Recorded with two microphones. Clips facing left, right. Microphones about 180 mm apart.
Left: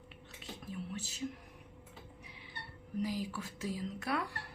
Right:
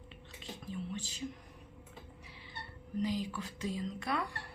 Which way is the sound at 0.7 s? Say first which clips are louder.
Right 2 dB; 5° left (ahead or behind).